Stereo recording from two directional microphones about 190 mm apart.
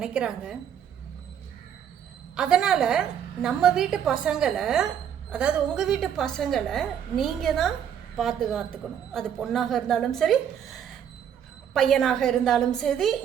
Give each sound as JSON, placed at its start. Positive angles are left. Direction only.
{"t": 0.0, "sound": "a woman's voice", "side_deg": -5}
{"t": 2.3, "sound": "a woman's voice", "side_deg": -5}